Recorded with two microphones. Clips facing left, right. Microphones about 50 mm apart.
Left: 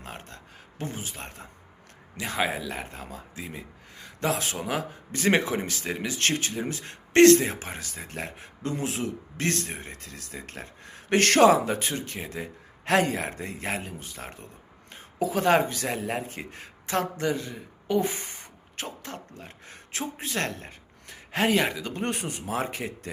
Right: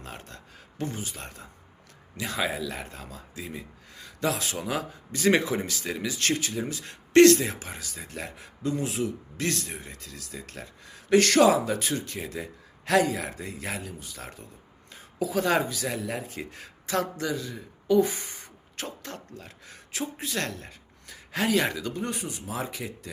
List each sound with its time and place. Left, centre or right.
0.0 s a sound: left
0.8 s speech: left
15.8 s speech: left
19.5 s speech: left
21.6 s speech: centre
21.9 s speech: left